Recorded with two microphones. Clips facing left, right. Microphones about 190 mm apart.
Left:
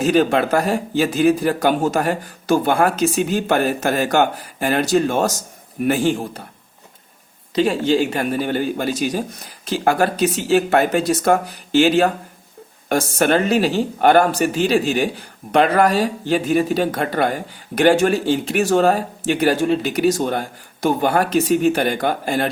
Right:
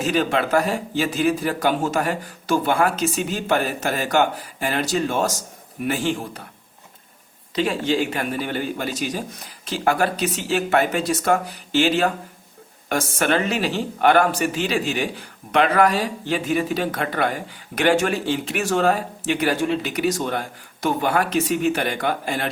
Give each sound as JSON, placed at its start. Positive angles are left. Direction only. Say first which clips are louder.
{"t": 0.0, "sound": "speech", "louder": "left 5 dB", "side_deg": 45}
{"t": 7.5, "sound": "speech", "louder": "left 5 dB", "side_deg": 35}